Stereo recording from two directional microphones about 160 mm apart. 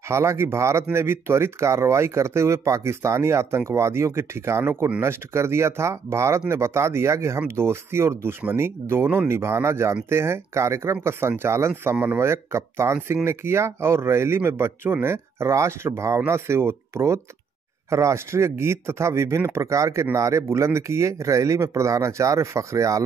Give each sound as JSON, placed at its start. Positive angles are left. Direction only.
{"t": 0.1, "sound": "speech", "side_deg": -15}